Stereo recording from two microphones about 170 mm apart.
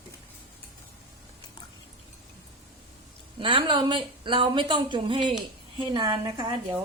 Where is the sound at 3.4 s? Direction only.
30° right (ahead or behind).